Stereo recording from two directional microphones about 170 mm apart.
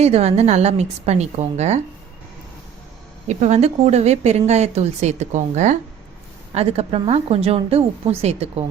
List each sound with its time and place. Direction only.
0.0 s speech: 35° right (ahead or behind)
3.2 s speech: 40° right (ahead or behind)